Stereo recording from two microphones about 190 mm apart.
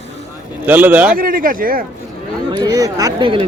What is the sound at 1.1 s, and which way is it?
Speech, 50° right (ahead or behind).